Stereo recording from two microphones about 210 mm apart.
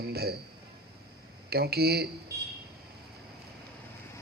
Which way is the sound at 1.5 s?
50° right (ahead or behind).